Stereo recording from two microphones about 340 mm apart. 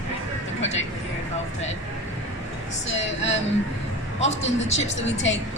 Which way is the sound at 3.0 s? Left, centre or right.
Left.